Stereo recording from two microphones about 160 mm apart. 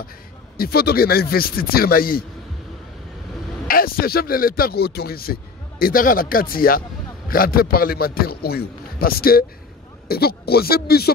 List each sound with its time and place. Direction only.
0.6 s a man's voice: 75° left (ahead or behind)
3.6 s a man's voice: 65° left (ahead or behind)